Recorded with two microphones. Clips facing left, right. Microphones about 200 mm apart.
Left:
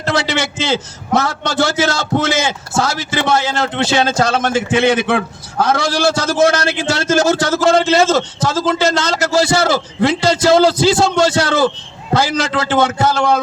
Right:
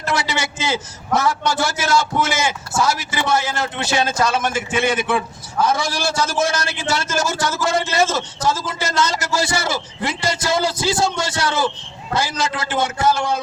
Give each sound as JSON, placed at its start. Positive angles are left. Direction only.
{"t": 0.0, "sound": "a man's voice", "side_deg": 70}